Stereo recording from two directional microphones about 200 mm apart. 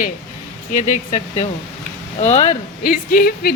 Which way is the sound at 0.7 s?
35° left (ahead or behind).